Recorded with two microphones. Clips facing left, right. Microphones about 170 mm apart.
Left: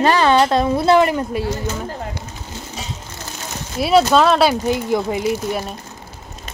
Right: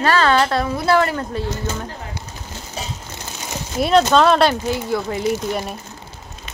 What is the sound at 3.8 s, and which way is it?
Speech, 5° left (ahead or behind).